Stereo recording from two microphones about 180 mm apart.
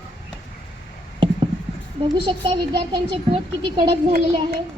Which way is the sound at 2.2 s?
25° right (ahead or behind).